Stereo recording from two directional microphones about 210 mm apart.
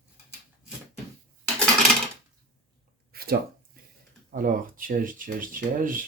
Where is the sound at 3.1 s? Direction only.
45° right (ahead or behind).